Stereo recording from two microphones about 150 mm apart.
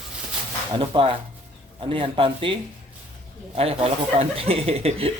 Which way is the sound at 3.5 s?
40° right (ahead or behind).